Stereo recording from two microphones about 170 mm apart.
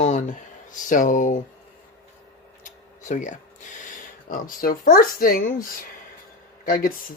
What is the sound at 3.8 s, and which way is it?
Speech, 50° left (ahead or behind).